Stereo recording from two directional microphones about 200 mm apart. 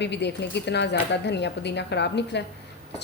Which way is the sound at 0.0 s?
60° left (ahead or behind).